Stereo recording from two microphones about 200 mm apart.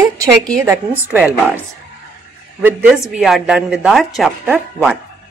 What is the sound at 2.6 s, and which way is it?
Speech, 10° right (ahead or behind).